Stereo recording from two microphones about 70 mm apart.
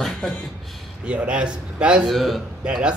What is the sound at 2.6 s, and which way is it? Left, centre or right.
Speech, centre.